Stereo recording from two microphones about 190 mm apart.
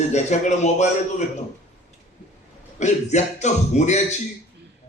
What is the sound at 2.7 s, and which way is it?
A man's voice, 40° left (ahead or behind).